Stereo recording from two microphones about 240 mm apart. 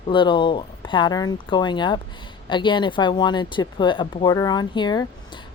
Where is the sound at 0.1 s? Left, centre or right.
Centre.